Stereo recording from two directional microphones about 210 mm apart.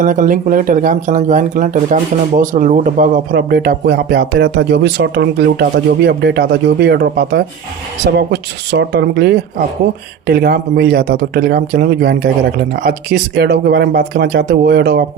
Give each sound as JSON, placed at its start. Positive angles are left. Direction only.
{"t": 0.0, "sound": "speech", "side_deg": -40}